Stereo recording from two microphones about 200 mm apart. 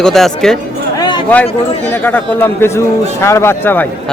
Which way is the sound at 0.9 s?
20° left (ahead or behind).